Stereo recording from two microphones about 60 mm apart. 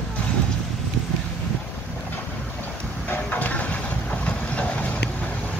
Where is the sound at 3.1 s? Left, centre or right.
Left.